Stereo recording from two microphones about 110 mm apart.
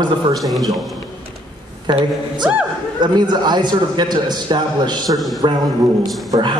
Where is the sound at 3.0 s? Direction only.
40° right (ahead or behind).